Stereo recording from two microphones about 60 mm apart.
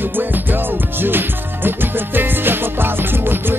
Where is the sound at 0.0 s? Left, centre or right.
Right.